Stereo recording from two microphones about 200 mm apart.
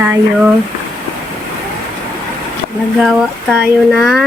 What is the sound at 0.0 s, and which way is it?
Speech, 10° right (ahead or behind).